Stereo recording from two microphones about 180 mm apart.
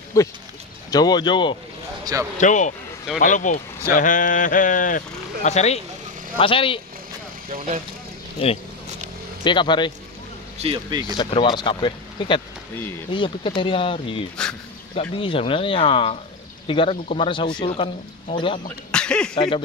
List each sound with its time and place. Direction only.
0.2 s a man's voice: 15° left (ahead or behind)
2.3 s a man's voice: 45° left (ahead or behind)
7.5 s speech: 40° right (ahead or behind)
8.4 s a man's voice: 30° left (ahead or behind)
10.6 s speech: 25° right (ahead or behind)
11.1 s a man's voice: 30° left (ahead or behind)
18.9 s speech: 5° left (ahead or behind)
19.3 s a man's voice: 25° left (ahead or behind)